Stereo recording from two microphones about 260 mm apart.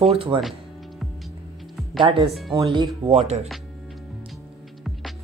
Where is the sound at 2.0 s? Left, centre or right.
Centre.